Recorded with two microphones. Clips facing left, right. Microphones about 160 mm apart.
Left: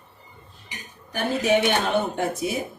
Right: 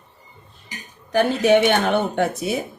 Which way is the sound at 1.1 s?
65° right (ahead or behind).